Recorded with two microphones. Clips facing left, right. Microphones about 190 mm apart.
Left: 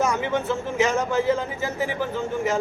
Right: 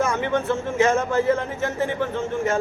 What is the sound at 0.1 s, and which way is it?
A man's voice, centre (ahead or behind).